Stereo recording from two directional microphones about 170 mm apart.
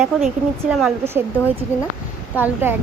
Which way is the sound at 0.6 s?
5° right (ahead or behind).